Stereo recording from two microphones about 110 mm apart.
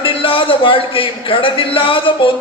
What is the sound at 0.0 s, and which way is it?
A man's voice, 55° left (ahead or behind).